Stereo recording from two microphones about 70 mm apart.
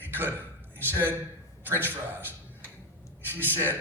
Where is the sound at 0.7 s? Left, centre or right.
Right.